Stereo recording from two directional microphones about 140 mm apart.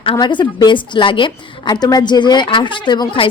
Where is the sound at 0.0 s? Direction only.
35° left (ahead or behind).